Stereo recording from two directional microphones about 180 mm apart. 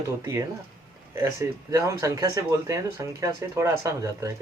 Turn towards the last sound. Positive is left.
turn(degrees=-15)  # may be behind; listen again after turning